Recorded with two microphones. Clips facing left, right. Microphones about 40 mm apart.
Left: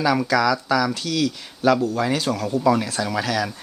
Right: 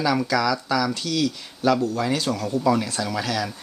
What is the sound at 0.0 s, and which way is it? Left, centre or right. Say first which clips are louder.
Speech: left 2 dB; centre.